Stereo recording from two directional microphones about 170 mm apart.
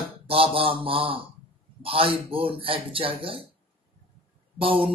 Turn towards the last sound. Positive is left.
turn(degrees=-30)  # may be behind; listen again after turning